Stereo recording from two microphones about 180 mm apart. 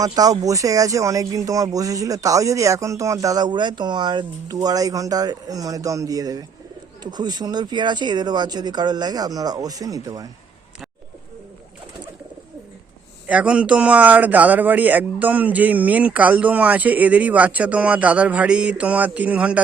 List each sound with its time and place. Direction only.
0.0 s speech: 20° right (ahead or behind)
13.2 s speech: 5° right (ahead or behind)